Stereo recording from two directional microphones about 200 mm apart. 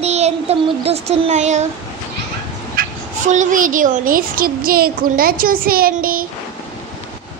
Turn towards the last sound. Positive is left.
turn(degrees=-45)  # may be behind; listen again after turning